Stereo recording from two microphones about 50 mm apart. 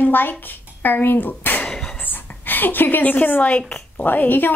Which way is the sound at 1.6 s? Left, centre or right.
Centre.